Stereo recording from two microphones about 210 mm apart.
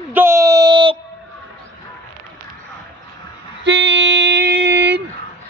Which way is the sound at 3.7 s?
55° right (ahead or behind).